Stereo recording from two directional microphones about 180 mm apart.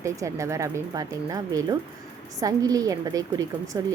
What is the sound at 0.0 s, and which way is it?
A woman's voice, 15° right (ahead or behind).